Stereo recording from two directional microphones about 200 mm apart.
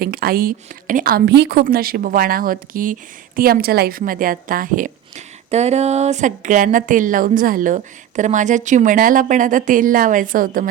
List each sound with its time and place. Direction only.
0.0 s a woman's voice: 50° right (ahead or behind)